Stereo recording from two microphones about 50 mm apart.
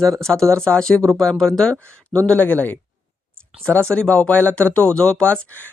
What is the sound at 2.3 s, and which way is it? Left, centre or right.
Speech, left.